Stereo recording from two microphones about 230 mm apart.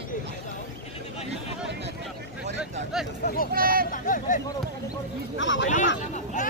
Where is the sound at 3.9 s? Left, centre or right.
Left.